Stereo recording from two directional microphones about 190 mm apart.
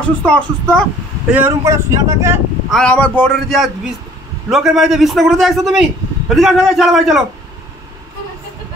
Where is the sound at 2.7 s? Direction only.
5° left (ahead or behind).